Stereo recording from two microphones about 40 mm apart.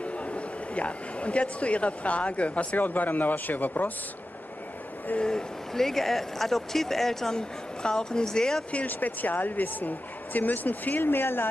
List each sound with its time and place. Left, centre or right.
0.0 s speech: left
2.8 s speech: left
5.1 s speech: left
5.8 s a woman's voice: centre
8.8 s speech: left